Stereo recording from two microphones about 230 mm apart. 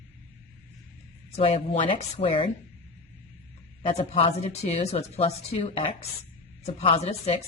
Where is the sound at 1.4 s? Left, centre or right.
Left.